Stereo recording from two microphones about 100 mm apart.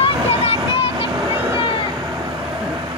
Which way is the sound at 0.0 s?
80° left.